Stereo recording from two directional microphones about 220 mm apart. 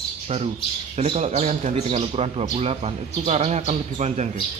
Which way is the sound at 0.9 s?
30° right (ahead or behind).